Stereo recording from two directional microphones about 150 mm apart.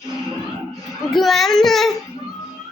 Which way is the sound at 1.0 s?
Centre (ahead or behind).